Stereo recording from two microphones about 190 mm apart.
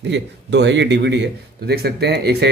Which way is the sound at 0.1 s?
65° right (ahead or behind).